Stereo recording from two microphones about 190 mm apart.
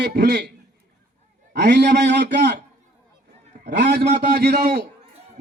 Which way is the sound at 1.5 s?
65° right (ahead or behind).